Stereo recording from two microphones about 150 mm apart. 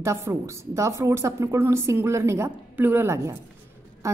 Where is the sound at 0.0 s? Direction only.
20° right (ahead or behind).